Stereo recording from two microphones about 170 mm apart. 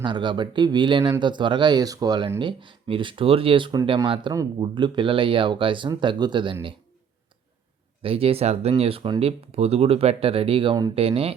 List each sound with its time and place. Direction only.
0.0 s speech: 25° right (ahead or behind)
8.0 s speech: 35° right (ahead or behind)